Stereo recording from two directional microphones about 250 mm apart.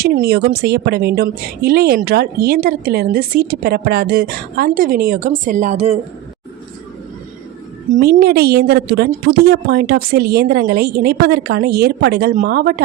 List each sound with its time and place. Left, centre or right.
0.0 s a woman's voice: right
7.9 s a woman's voice: right